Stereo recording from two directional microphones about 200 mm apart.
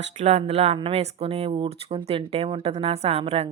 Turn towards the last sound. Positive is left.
turn(degrees=-30)  # may be behind; listen again after turning